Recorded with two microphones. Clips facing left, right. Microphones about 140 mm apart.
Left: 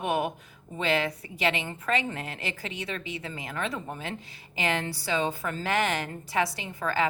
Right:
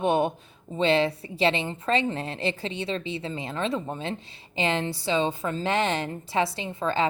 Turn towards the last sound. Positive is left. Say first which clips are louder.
# right 3 dB
turn(degrees=-25)  # may be behind; listen again after turning